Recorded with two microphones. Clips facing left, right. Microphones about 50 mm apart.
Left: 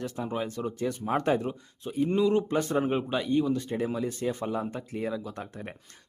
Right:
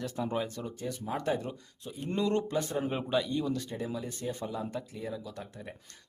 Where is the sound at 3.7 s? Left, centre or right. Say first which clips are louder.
Left 7 dB; left.